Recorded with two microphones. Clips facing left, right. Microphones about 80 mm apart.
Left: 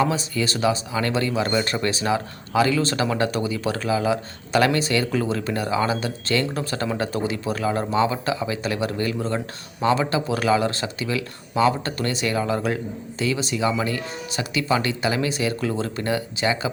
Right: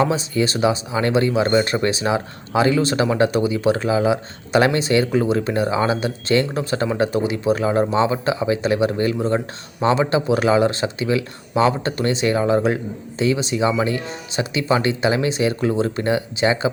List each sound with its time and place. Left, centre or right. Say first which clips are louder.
0.0 s speech: right 3 dB; right